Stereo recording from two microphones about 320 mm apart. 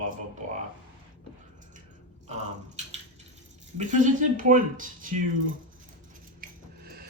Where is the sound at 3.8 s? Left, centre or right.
Right.